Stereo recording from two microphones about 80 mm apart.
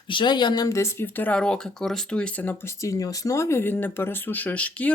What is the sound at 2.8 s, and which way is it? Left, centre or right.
Speech, left.